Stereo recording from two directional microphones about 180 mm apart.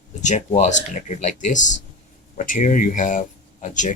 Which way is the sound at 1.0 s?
45° left (ahead or behind).